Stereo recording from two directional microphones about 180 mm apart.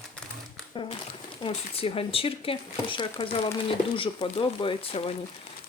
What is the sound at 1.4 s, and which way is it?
Speech, 30° left (ahead or behind).